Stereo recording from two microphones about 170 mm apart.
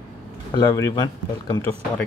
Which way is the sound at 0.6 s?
20° left (ahead or behind).